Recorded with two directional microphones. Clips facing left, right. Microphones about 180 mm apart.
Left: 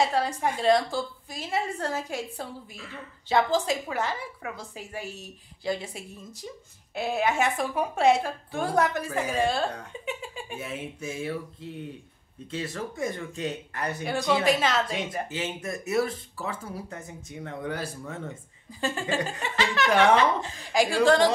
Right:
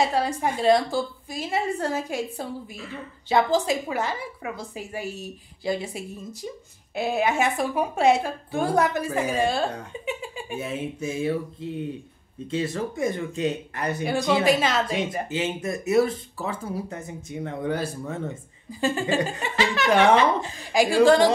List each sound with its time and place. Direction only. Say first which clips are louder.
0.0 s a woman's voice: right 2 dB; 10° right (ahead or behind)
10.6 s speech: right 6 dB; 25° right (ahead or behind)
12.4 s speech: right 6 dB; 20° right (ahead or behind)
14.4 s speech: right 3 dB; 5° right (ahead or behind)
15.2 s speech: right 5 dB; 20° right (ahead or behind)
18.7 s a woman's voice: right 5 dB; 5° right (ahead or behind)
19.9 s speech: right 2 dB; 25° right (ahead or behind)
20.4 s a woman's voice: right 3 dB; 10° right (ahead or behind)